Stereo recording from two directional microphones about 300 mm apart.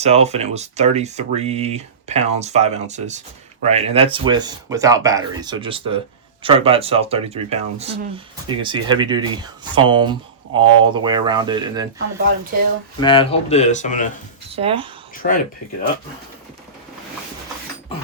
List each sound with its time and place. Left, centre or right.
0.0 s speech: right
13.0 s speech: centre
14.5 s speech: centre
15.1 s speech: left